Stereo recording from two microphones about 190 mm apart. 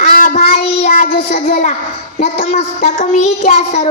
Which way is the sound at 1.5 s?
35° left (ahead or behind).